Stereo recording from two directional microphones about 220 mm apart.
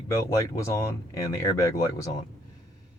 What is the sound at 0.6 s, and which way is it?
Speech, 10° left (ahead or behind).